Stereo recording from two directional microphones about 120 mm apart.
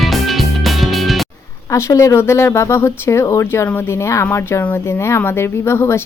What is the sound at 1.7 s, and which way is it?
Speech, 25° left (ahead or behind).